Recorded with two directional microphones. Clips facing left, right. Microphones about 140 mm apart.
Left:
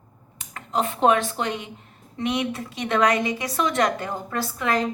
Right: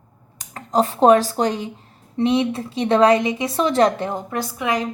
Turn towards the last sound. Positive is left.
turn(degrees=-15)  # may be behind; listen again after turning